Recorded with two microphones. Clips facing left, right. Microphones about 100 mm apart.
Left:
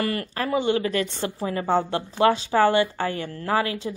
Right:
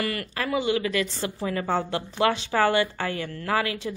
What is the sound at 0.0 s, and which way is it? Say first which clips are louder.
A woman's voice: left 3 dB; 35° left (ahead or behind).